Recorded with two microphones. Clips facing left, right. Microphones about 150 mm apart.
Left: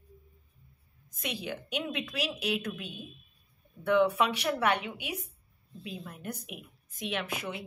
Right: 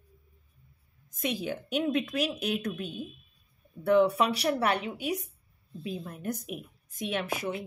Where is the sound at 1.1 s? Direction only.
45° right (ahead or behind).